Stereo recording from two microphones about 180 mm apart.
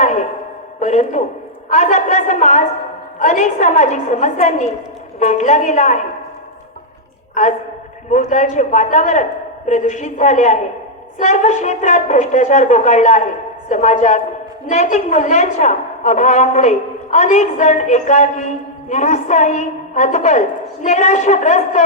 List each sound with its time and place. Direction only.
0.0 s a sound: 40° left (ahead or behind)
1.7 s a woman's voice: 40° left (ahead or behind)
8.1 s a woman's voice: 40° left (ahead or behind)